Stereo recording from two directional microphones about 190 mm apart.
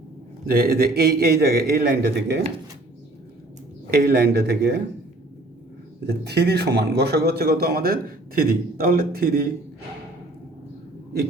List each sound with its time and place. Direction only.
0.4 s a man's voice: 50° right (ahead or behind)
3.9 s a man's voice: 55° right (ahead or behind)
6.1 s a man's voice: 60° right (ahead or behind)